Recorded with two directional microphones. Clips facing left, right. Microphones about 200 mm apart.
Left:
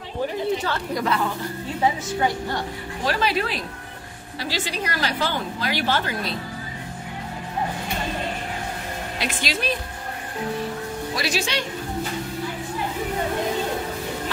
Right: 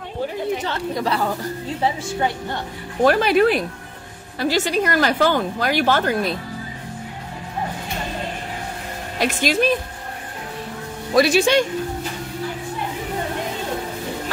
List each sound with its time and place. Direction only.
0.7 s a woman's voice: 30° right (ahead or behind)
3.0 s a woman's voice: 55° right (ahead or behind)
9.2 s a woman's voice: 50° right (ahead or behind)
11.1 s a woman's voice: 55° right (ahead or behind)